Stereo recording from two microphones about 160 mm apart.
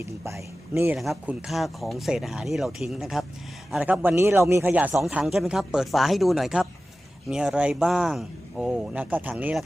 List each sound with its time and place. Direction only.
0.0 s a man's voice: 15° right (ahead or behind)
0.9 s speech: centre (ahead or behind)